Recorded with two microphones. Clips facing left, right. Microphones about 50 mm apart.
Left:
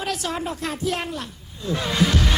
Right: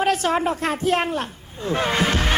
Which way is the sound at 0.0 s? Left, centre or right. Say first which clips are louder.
Right 7 dB; right.